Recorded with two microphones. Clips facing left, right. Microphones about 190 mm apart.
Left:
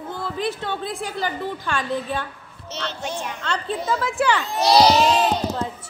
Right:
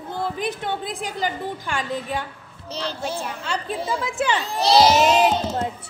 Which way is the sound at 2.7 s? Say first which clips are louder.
Right 2 dB; 35° right (ahead or behind).